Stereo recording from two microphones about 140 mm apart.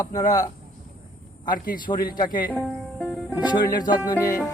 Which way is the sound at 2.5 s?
5° left (ahead or behind).